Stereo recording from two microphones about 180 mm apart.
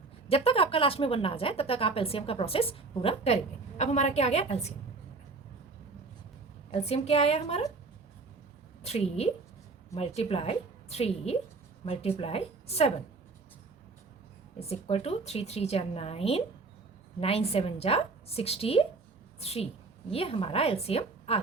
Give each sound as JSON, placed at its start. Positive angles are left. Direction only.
{"t": 0.3, "sound": "a woman's voice", "side_deg": 30}
{"t": 6.7, "sound": "a woman's voice", "side_deg": 35}
{"t": 8.8, "sound": "a woman's voice", "side_deg": 35}
{"t": 14.6, "sound": "a woman's voice", "side_deg": 35}